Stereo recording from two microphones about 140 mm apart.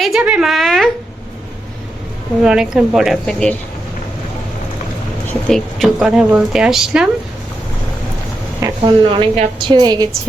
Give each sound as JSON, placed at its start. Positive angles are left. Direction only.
{"t": 0.0, "sound": "a woman's voice", "side_deg": -5}
{"t": 2.4, "sound": "speech", "side_deg": -5}
{"t": 5.5, "sound": "speech", "side_deg": 5}
{"t": 8.8, "sound": "a woman's voice", "side_deg": -35}